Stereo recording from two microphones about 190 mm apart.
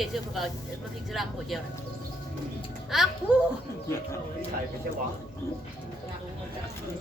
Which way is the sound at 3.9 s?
15° left (ahead or behind).